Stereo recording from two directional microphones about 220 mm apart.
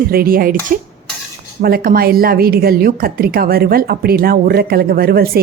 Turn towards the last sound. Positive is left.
turn(degrees=-45)  # may be behind; listen again after turning